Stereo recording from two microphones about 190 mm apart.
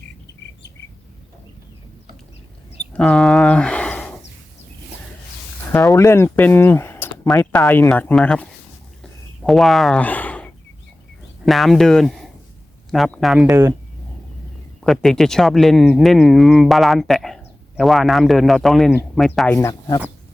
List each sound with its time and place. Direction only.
2.9 s speech: centre (ahead or behind)
5.9 s speech: 15° left (ahead or behind)
9.4 s a sound: centre (ahead or behind)
11.4 s speech: centre (ahead or behind)
13.5 s speech: 15° right (ahead or behind)
14.8 s speech: centre (ahead or behind)
19.5 s speech: 15° left (ahead or behind)